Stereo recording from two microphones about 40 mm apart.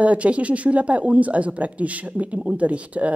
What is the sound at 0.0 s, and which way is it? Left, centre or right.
Speech, right.